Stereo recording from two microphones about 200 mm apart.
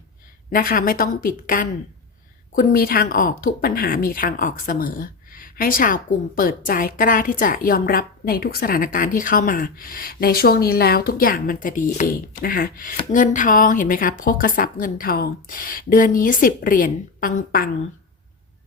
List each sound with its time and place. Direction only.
0.5 s a woman's voice: 45° left (ahead or behind)